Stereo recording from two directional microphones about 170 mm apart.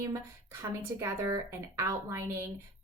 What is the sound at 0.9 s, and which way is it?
A woman's voice, 15° right (ahead or behind).